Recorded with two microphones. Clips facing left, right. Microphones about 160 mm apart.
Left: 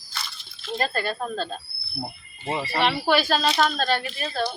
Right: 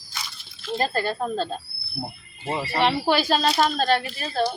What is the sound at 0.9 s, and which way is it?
Speech, 25° right (ahead or behind).